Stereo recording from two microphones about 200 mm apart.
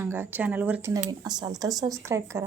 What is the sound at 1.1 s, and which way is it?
A woman's voice, 20° right (ahead or behind).